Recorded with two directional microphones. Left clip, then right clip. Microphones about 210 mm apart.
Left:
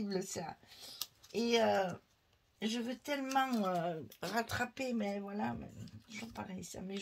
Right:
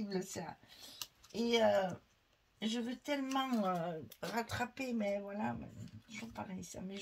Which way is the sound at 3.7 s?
40° left (ahead or behind).